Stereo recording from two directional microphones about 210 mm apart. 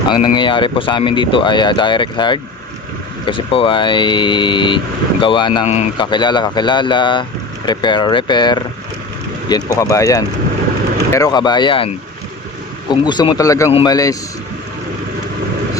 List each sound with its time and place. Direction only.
0.1 s speech: 25° left (ahead or behind)
12.9 s speech: 20° left (ahead or behind)